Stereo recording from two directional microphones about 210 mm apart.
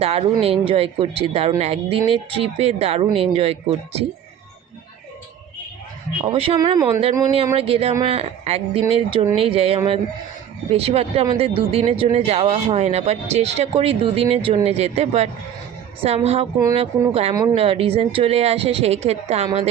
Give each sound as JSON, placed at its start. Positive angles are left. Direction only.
{"t": 0.0, "sound": "speech", "side_deg": -30}
{"t": 6.2, "sound": "speech", "side_deg": -25}